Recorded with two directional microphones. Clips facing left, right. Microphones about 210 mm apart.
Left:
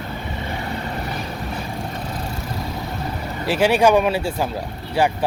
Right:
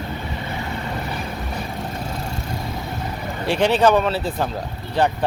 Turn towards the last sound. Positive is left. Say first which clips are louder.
# even
turn(degrees=10)  # may be behind; listen again after turning